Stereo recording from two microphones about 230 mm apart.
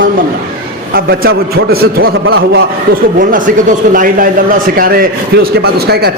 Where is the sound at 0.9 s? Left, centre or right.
Right.